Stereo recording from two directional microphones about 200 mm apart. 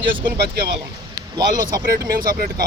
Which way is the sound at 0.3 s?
50° right (ahead or behind).